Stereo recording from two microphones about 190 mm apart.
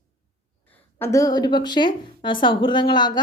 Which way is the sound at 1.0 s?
15° left (ahead or behind).